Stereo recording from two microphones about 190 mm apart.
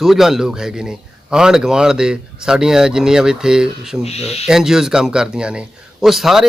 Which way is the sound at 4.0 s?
35° left (ahead or behind).